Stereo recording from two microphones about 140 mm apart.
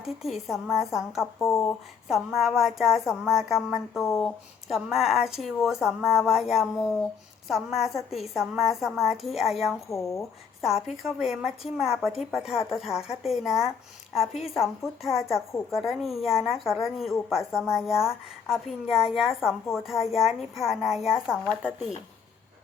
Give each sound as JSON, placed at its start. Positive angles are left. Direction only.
{"t": 0.0, "sound": "a woman's voice", "side_deg": 0}
{"t": 1.4, "sound": "speech", "side_deg": 20}
{"t": 2.0, "sound": "a woman's voice", "side_deg": 0}
{"t": 9.9, "sound": "speech", "side_deg": 20}
{"t": 10.6, "sound": "a woman's voice", "side_deg": -5}